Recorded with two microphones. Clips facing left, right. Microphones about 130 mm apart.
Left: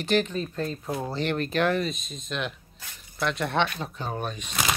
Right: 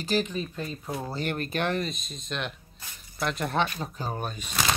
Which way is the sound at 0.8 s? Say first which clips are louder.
Left 3 dB; 15° left (ahead or behind).